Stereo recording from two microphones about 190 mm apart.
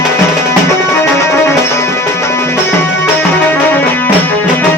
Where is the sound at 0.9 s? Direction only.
15° left (ahead or behind).